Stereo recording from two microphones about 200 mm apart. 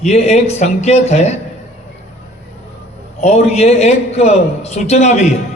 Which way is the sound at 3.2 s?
30° left (ahead or behind).